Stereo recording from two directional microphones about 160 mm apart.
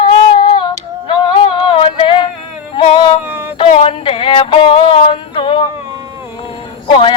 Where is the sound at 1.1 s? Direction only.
30° left (ahead or behind).